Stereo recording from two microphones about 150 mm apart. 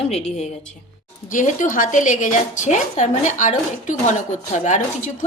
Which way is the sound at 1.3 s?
60° left (ahead or behind).